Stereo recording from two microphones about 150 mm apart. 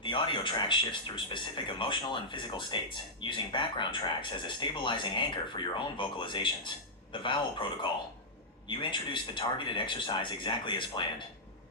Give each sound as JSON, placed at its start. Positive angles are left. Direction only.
{"t": 0.0, "sound": "speech", "side_deg": 35}
{"t": 8.6, "sound": "speech", "side_deg": 35}